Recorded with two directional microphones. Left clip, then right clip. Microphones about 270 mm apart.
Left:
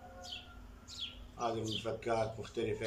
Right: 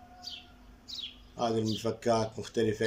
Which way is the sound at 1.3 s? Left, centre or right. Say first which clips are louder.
Right 7 dB; right.